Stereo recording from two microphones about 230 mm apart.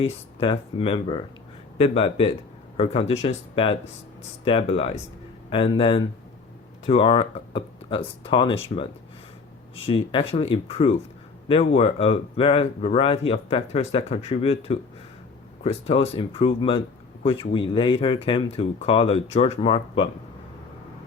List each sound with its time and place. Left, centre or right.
0.0 s speech: left